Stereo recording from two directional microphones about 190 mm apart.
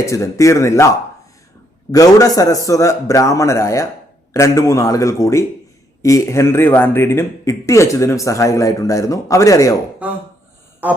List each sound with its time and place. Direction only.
0.0 s speech: 15° left (ahead or behind)
1.9 s speech: 20° left (ahead or behind)
10.8 s a sound: 10° right (ahead or behind)